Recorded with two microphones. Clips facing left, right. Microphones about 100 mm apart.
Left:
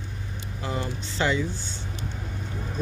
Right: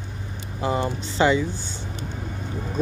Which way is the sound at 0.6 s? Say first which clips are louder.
Right 7 dB; 20° right (ahead or behind).